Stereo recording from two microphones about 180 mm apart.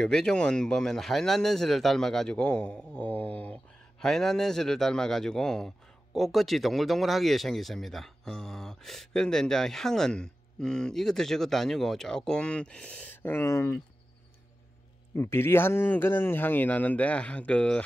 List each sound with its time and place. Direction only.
0.0 s speech: 5° left (ahead or behind)
15.1 s speech: 15° left (ahead or behind)